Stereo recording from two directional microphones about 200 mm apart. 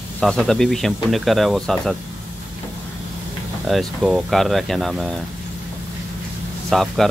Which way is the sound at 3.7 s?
Centre (ahead or behind).